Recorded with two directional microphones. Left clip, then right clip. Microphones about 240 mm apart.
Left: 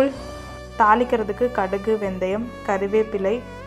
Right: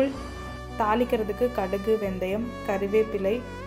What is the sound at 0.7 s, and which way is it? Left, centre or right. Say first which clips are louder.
Speech: left 7 dB; centre.